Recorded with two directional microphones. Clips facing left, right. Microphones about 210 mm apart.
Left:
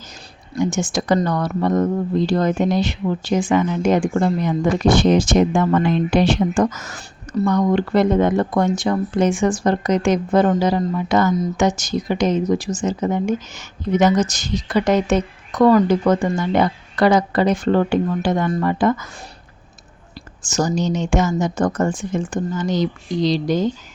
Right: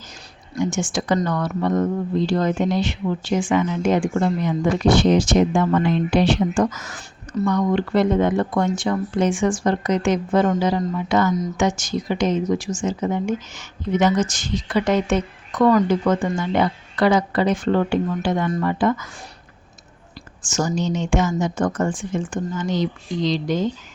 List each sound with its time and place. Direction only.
0.6 s speech: 40° left (ahead or behind)
20.4 s speech: 35° left (ahead or behind)